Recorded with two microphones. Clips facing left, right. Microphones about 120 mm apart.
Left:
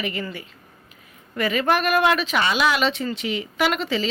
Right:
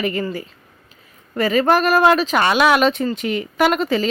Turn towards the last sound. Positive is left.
turn(degrees=-45)  # may be behind; listen again after turning